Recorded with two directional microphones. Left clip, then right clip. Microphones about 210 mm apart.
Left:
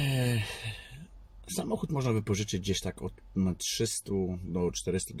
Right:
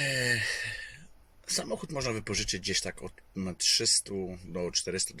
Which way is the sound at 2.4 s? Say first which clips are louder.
Right 2 dB; 10° left (ahead or behind).